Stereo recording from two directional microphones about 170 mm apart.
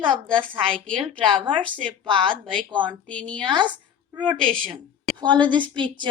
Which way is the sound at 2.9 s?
5° left (ahead or behind).